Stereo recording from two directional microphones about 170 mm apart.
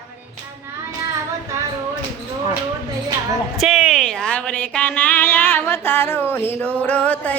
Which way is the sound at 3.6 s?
Centre (ahead or behind).